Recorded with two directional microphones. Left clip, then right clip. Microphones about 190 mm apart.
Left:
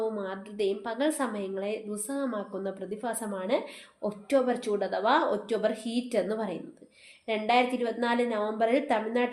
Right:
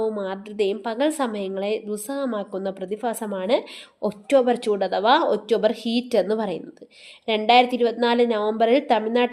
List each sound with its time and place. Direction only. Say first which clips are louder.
0.0 s a woman's voice: right 7 dB; 45° right (ahead or behind)